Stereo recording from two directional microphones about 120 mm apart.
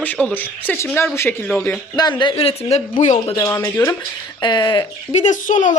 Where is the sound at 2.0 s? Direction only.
35° left (ahead or behind); by 2.8 s 55° left (ahead or behind).